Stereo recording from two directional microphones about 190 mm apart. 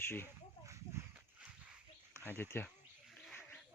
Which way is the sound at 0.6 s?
15° right (ahead or behind).